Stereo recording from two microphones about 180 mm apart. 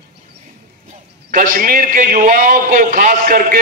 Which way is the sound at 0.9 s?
45° right (ahead or behind).